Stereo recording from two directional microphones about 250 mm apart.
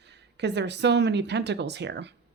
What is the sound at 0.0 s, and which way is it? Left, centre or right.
Speech, right.